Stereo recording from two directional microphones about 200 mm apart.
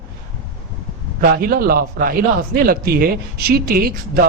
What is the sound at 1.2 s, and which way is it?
A man's voice, 45° right (ahead or behind).